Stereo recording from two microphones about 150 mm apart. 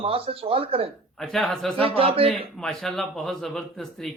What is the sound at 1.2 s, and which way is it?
Speech, 5° left (ahead or behind).